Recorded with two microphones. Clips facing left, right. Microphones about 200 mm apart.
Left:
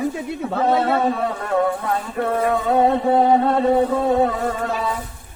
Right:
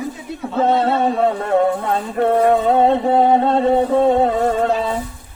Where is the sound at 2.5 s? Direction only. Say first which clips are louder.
Right 3 dB; 25° right (ahead or behind).